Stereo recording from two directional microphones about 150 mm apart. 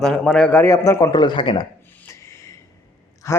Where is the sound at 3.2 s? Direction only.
20° left (ahead or behind).